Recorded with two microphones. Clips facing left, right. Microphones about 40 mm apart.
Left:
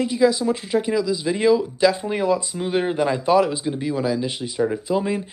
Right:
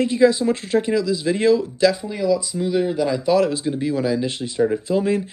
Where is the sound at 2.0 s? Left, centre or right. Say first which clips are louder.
Even; left.